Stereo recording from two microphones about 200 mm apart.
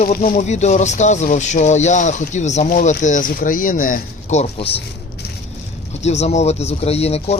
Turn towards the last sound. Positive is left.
turn(degrees=30)  # may be behind; listen again after turning